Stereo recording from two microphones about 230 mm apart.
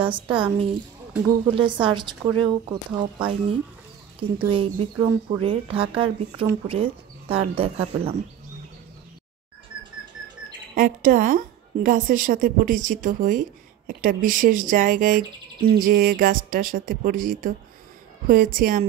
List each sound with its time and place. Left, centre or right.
0.0 s speech: right
10.7 s a woman's voice: right